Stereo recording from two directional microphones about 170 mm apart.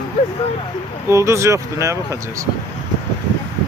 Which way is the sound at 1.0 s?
15° right (ahead or behind).